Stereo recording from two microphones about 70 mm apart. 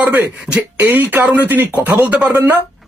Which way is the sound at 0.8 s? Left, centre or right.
Right.